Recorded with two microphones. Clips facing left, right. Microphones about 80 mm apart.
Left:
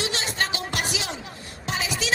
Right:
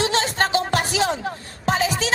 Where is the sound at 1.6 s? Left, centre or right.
Right.